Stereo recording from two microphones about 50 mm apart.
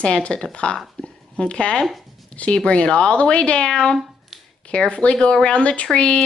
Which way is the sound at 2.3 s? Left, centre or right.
Left.